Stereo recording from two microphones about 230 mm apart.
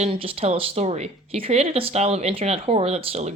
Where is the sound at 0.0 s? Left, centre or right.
Right.